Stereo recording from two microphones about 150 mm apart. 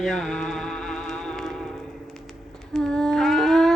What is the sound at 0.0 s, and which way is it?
Music, centre (ahead or behind).